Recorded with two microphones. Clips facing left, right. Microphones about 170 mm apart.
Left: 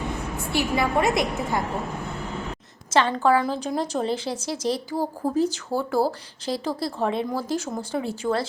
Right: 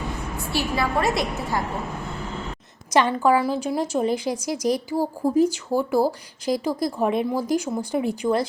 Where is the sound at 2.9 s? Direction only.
15° right (ahead or behind).